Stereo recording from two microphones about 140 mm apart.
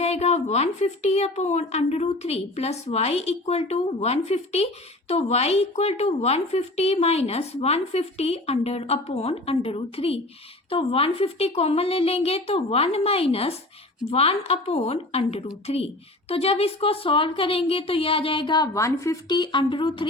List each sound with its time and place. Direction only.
0.0 s a woman's voice: 50° left (ahead or behind)